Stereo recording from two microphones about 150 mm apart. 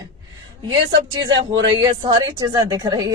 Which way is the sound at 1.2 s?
30° right (ahead or behind).